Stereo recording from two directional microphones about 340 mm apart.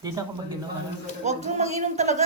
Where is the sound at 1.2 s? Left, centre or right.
Centre.